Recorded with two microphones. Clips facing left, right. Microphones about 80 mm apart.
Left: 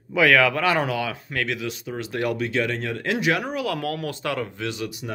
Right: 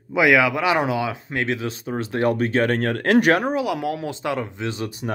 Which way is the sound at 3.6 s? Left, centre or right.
Centre.